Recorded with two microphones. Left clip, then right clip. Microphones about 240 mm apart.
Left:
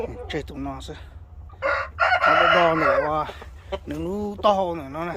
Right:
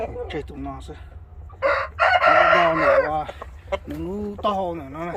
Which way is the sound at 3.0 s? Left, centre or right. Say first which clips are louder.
Even; centre.